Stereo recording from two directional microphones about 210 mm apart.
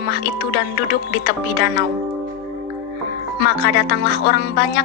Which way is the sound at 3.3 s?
50° left (ahead or behind).